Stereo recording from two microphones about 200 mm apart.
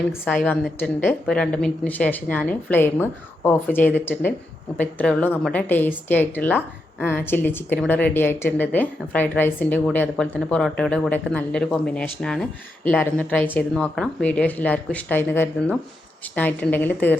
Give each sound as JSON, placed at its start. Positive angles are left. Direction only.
{"t": 0.3, "sound": "a woman's voice", "side_deg": 5}